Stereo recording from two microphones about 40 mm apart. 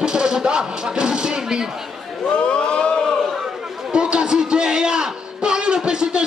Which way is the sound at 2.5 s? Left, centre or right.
Left.